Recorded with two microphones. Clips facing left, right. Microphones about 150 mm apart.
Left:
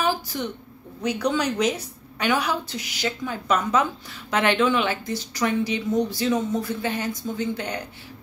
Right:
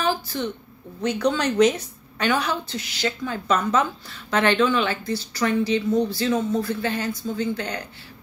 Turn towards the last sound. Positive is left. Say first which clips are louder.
# right 1 dB
turn(degrees=15)  # may be behind; listen again after turning